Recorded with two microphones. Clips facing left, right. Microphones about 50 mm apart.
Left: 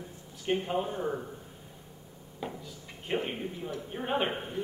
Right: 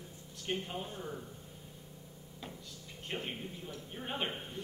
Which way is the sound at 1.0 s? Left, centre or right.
Left.